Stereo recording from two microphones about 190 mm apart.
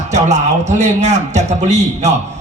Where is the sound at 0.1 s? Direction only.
35° right (ahead or behind).